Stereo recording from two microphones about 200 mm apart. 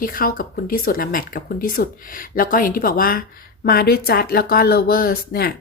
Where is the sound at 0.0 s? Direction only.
45° left (ahead or behind).